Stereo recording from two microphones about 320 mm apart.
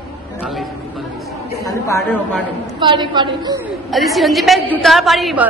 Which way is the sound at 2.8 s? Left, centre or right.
Centre.